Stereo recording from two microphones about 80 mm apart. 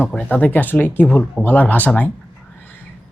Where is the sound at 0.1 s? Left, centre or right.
Centre.